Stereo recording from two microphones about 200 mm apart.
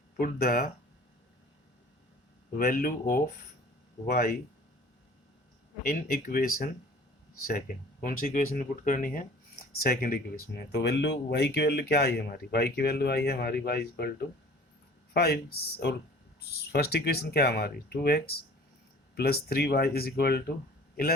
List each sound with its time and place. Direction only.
0.2 s speech: 45° left (ahead or behind)
2.6 s speech: 45° left (ahead or behind)
5.8 s speech: 45° left (ahead or behind)
15.1 s speech: 50° left (ahead or behind)